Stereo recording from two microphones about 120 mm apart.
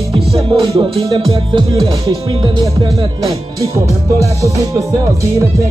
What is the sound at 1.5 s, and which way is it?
Music, 30° right (ahead or behind).